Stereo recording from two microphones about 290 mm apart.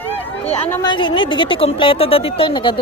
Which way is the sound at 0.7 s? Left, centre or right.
Centre.